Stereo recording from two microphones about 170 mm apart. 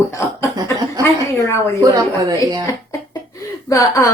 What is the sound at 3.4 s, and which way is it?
Whimper, 20° left (ahead or behind).